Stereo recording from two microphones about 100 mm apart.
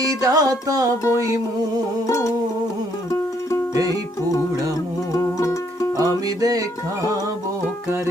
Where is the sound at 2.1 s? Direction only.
35° left (ahead or behind).